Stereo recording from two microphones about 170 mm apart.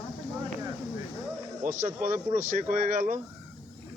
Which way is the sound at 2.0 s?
50° right (ahead or behind).